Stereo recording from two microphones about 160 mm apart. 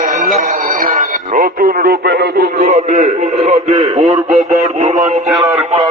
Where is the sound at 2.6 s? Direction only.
45° right (ahead or behind).